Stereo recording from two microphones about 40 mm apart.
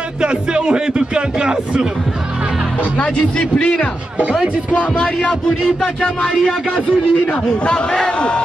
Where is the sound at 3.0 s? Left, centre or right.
Left.